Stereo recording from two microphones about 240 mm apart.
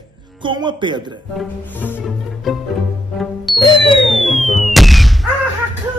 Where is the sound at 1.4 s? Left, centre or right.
Centre.